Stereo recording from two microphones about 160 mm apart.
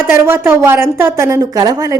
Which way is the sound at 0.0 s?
15° right (ahead or behind).